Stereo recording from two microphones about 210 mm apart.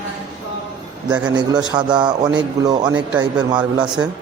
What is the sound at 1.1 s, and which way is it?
A man's voice, 20° right (ahead or behind).